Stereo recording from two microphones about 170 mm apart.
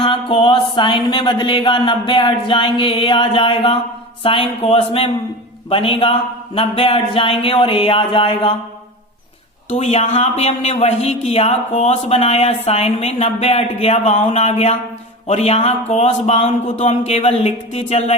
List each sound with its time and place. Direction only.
0.0 s a man's voice: 30° left (ahead or behind)
9.6 s a man's voice: 40° left (ahead or behind)